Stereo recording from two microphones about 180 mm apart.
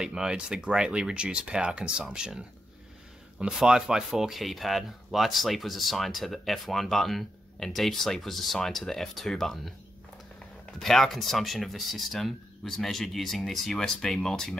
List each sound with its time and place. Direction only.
0.0 s speech: 5° right (ahead or behind)
10.8 s speech: centre (ahead or behind)